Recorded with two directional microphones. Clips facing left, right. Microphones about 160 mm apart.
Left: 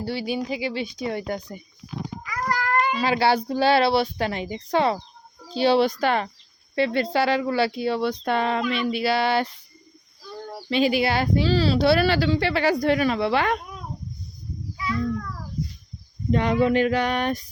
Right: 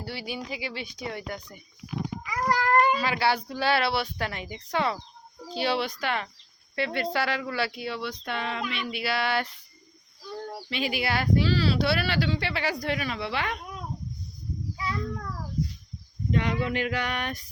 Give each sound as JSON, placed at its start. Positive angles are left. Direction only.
{"t": 0.0, "sound": "speech", "side_deg": 25}
{"t": 2.5, "sound": "a sound", "side_deg": -40}
{"t": 3.0, "sound": "speech", "side_deg": 30}
{"t": 10.7, "sound": "speech", "side_deg": 30}
{"t": 14.8, "sound": "a sound", "side_deg": -35}
{"t": 16.3, "sound": "speech", "side_deg": 40}